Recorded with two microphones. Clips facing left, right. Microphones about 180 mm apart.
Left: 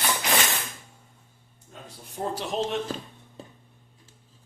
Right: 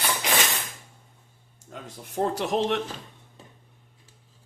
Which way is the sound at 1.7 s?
75° right (ahead or behind).